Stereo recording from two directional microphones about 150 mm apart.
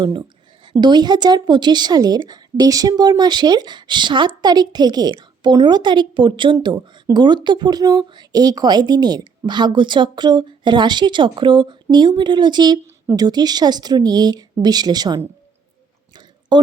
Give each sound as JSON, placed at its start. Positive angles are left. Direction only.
{"t": 0.0, "sound": "a woman's voice", "side_deg": -30}
{"t": 16.5, "sound": "a woman's voice", "side_deg": -30}